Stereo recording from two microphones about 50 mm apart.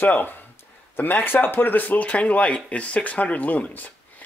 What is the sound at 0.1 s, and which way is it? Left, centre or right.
Speech, left.